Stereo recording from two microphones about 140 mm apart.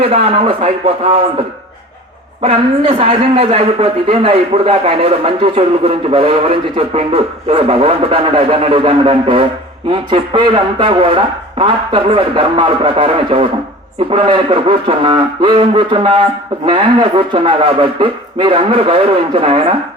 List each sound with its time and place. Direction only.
0.0 s a man's voice: 40° right (ahead or behind)
2.4 s speech: 40° right (ahead or behind)